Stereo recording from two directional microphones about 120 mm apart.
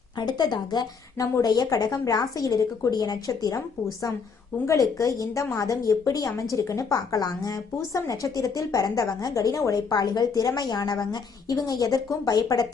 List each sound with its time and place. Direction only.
0.2 s a woman's voice: 35° left (ahead or behind)